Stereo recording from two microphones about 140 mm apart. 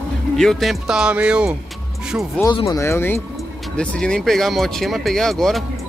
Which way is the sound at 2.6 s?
20° left (ahead or behind).